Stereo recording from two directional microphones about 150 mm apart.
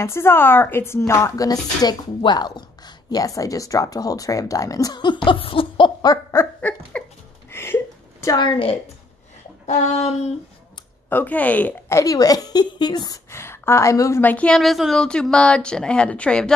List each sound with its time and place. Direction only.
0.0 s a woman's voice: 15° left (ahead or behind); by 6.1 s 35° left (ahead or behind)
6.3 s a sound: 10° left (ahead or behind)
8.5 s a woman's voice: 35° left (ahead or behind)
9.7 s speech: 50° left (ahead or behind)
11.1 s a woman's voice: 10° left (ahead or behind); by 13.2 s 30° left (ahead or behind)
13.3 s a woman's voice: 15° left (ahead or behind)